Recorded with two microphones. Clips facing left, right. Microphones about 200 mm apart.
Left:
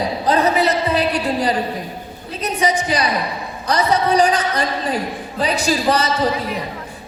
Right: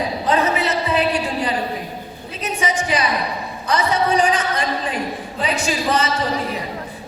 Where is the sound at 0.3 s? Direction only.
35° left (ahead or behind).